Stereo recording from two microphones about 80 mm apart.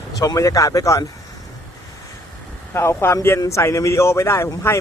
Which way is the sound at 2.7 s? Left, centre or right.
Left.